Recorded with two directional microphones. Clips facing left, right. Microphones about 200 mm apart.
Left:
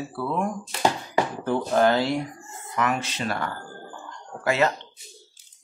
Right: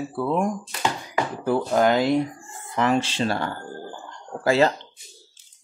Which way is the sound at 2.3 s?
30° right (ahead or behind).